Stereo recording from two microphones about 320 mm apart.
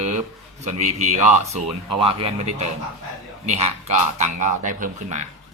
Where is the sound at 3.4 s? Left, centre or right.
Right.